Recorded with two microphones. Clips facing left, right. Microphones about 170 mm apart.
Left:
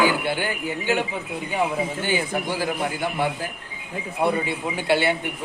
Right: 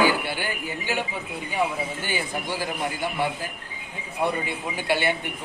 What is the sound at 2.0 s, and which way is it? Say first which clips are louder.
Speech: left 5 dB; 15° left (ahead or behind).